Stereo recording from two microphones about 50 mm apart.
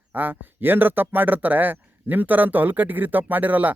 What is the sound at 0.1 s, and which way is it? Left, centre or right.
Speech, right.